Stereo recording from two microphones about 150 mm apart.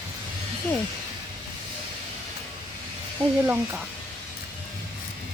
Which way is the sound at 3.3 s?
15° right (ahead or behind).